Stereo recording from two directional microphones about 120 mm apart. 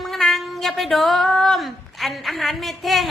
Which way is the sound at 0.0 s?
Centre (ahead or behind).